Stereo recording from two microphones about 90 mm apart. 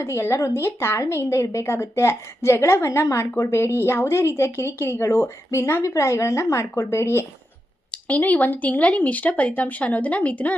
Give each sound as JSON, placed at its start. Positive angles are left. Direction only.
{"t": 0.0, "sound": "a woman's voice", "side_deg": 30}
{"t": 7.9, "sound": "speech", "side_deg": 15}